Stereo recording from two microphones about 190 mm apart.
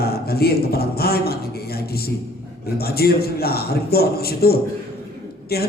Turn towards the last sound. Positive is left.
turn(degrees=55)  # may be behind; listen again after turning